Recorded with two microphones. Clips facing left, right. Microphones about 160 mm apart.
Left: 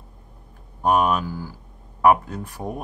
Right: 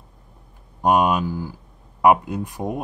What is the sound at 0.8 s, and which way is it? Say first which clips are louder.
Speech: right 2 dB; 15° right (ahead or behind).